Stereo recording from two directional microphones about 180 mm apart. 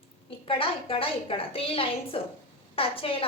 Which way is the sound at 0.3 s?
30° left (ahead or behind).